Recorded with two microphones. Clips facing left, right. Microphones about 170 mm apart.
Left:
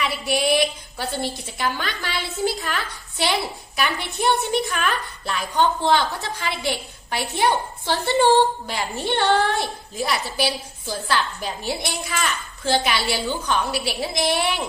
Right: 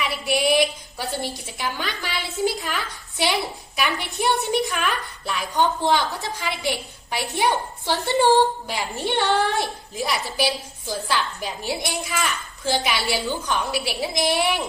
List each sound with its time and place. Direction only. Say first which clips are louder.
0.0 s a woman's voice: even; 15° right (ahead or behind)